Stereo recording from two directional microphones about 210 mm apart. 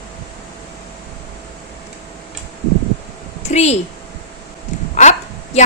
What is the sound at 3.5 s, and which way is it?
Speech, 30° left (ahead or behind).